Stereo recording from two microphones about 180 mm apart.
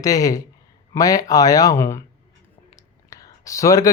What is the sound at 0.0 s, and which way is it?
Speech, 20° left (ahead or behind).